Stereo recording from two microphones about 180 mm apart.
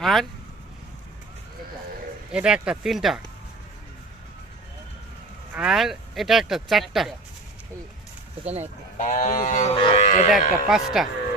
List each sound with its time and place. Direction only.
0.0 s speech: centre (ahead or behind)
2.3 s speech: 5° right (ahead or behind)
5.5 s speech: 5° right (ahead or behind)
8.4 s speech: 35° right (ahead or behind)
9.0 s speech: 45° left (ahead or behind)
9.7 s cattle: 30° left (ahead or behind)
10.7 s speech: centre (ahead or behind)